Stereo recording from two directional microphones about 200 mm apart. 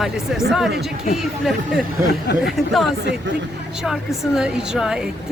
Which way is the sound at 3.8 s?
Centre (ahead or behind).